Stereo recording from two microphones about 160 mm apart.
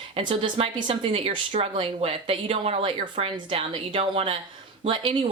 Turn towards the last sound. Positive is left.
turn(degrees=-35)  # may be behind; listen again after turning